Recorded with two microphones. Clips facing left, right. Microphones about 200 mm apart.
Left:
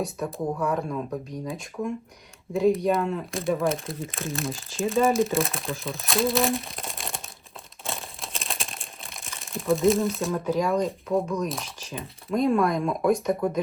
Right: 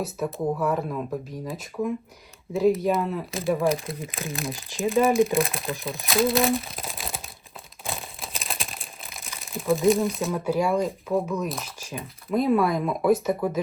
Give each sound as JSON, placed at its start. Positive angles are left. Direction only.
{"t": 0.0, "sound": "speech", "side_deg": 0}
{"t": 4.5, "sound": "speech", "side_deg": -15}
{"t": 4.9, "sound": "speech", "side_deg": 0}